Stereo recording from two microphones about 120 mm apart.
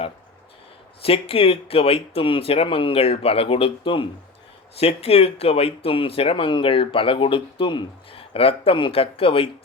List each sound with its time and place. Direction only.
1.0 s speech: 50° left (ahead or behind)